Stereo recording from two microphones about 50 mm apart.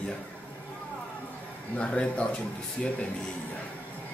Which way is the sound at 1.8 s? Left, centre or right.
Left.